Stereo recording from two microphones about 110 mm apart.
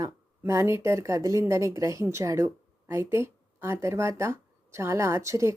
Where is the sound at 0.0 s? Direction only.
25° right (ahead or behind).